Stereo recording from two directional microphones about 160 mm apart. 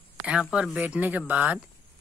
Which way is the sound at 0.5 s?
10° right (ahead or behind).